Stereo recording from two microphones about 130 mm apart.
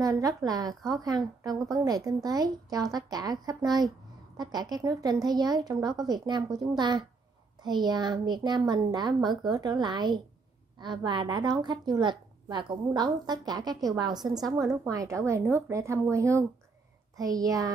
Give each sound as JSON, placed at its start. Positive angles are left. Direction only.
{"t": 0.0, "sound": "a woman's voice", "side_deg": -25}